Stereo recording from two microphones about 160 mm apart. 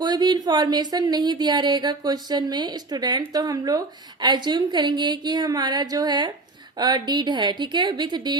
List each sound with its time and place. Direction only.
0.0 s speech: 25° right (ahead or behind)